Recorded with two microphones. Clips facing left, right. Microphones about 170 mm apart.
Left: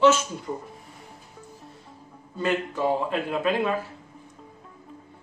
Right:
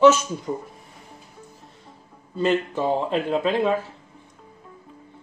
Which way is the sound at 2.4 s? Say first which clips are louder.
Right 3 dB; 25° right (ahead or behind).